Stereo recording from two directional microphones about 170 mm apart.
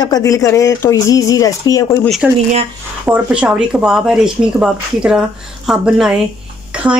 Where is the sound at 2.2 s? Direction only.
5° right (ahead or behind).